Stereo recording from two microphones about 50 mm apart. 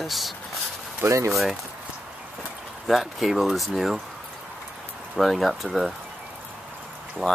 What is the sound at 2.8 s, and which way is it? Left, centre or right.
Speech, centre.